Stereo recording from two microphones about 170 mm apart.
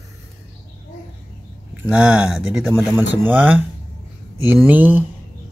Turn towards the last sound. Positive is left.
turn(degrees=-10)  # may be behind; listen again after turning